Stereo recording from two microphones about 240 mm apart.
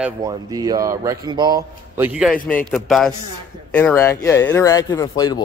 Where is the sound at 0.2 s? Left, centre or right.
Centre.